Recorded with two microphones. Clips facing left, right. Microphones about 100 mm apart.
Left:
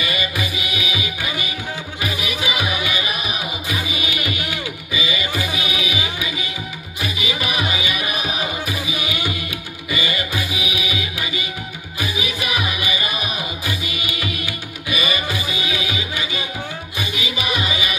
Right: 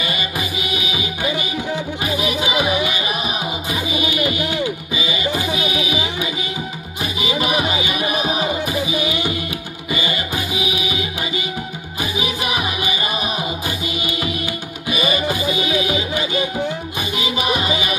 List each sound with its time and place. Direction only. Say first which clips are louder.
0.0 s music: even; 35° right (ahead or behind)
7.0 s music: right 3 dB; 35° right (ahead or behind)